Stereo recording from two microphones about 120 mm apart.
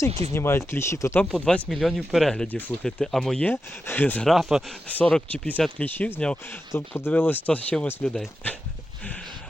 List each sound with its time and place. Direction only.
0.3 s speech: 20° left (ahead or behind)
1.2 s speech: 5° left (ahead or behind)
3.5 s speech: 15° left (ahead or behind)
4.3 s speech: centre (ahead or behind)
4.9 s speech: 10° left (ahead or behind)